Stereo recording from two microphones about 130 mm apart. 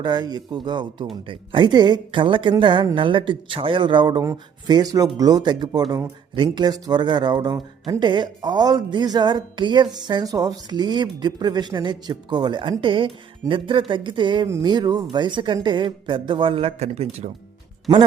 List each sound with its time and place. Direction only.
0.0 s speech: 35° right (ahead or behind); by 17.3 s 55° right (ahead or behind)
17.9 s speech: 30° right (ahead or behind)